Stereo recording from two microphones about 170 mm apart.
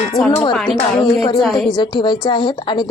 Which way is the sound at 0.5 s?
5° left (ahead or behind).